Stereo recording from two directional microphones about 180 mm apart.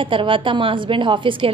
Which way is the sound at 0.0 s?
30° right (ahead or behind).